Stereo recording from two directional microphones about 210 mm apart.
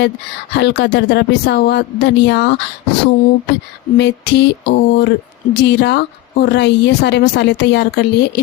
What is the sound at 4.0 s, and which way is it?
Speech, 55° left (ahead or behind).